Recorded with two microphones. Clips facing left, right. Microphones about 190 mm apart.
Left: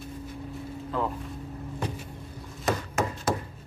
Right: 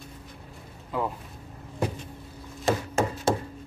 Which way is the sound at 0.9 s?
10° right (ahead or behind).